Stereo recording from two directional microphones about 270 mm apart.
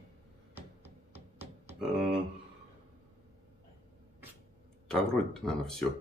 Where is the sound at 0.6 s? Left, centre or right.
Centre.